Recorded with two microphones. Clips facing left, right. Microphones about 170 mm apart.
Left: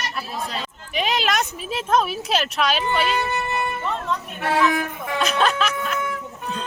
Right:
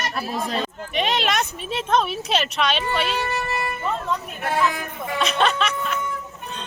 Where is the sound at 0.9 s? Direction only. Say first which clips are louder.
Left 1 dB; centre (ahead or behind).